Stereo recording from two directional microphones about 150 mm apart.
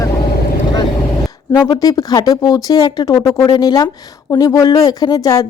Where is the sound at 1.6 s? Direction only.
25° left (ahead or behind).